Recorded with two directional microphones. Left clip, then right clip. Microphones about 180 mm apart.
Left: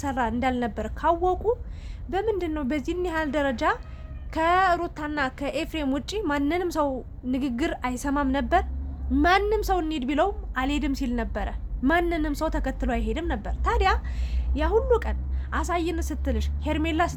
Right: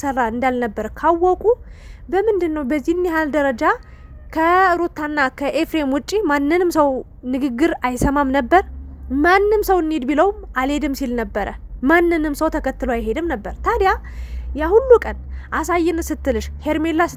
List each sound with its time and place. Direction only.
0.0 s a woman's voice: 45° right (ahead or behind)